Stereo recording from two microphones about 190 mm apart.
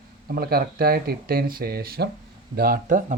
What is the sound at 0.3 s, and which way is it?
Speech, 50° right (ahead or behind).